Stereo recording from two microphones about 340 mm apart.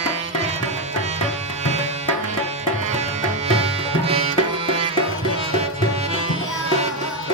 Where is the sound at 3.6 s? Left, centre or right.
Centre.